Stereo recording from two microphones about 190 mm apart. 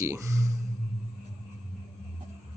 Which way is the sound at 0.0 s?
15° right (ahead or behind).